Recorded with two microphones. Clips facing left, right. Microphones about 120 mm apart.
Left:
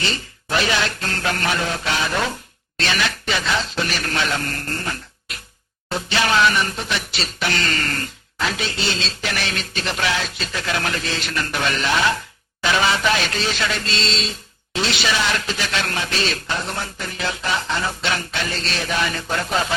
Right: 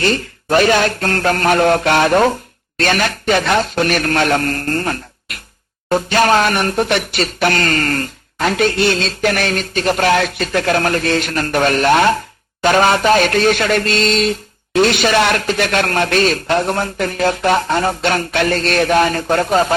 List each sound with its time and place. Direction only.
0.0 s speech: 50° right (ahead or behind)